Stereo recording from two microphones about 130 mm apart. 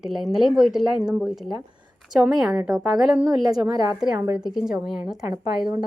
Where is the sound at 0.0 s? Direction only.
Centre (ahead or behind).